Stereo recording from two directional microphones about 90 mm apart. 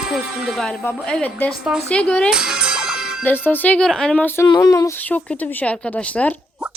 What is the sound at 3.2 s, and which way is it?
Speech, 20° left (ahead or behind).